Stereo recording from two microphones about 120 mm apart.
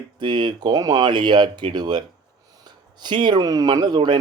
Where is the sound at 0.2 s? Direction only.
40° right (ahead or behind).